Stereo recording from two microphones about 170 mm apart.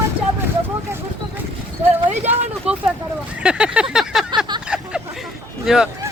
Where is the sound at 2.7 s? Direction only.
35° right (ahead or behind).